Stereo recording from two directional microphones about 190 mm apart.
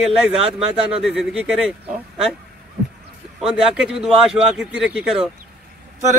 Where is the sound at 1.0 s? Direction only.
5° right (ahead or behind).